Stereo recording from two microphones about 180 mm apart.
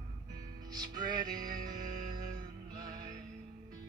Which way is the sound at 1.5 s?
50° right (ahead or behind).